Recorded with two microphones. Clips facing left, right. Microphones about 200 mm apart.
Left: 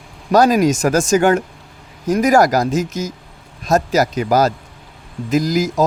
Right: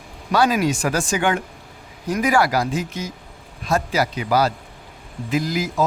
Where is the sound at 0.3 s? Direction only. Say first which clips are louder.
Left 6 dB; 40° left (ahead or behind).